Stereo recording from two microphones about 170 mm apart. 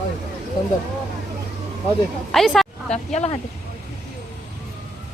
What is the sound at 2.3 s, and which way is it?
Speech, centre (ahead or behind).